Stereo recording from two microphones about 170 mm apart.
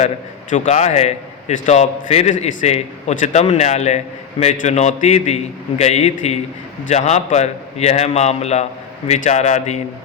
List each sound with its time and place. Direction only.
0.5 s a man's voice: 45° left (ahead or behind)